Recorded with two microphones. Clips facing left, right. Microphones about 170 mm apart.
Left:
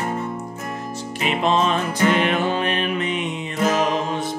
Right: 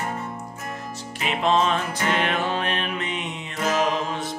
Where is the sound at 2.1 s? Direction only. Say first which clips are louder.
Left 1 dB; 5° left (ahead or behind).